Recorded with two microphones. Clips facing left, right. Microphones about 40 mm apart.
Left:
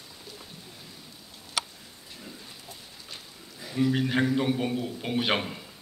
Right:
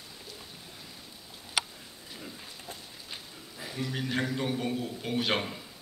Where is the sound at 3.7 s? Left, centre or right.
Centre.